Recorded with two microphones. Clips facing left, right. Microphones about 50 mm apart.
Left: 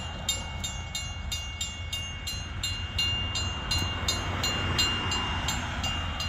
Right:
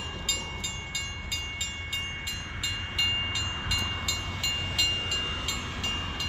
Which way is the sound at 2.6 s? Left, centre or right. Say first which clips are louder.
Right 2 dB; centre.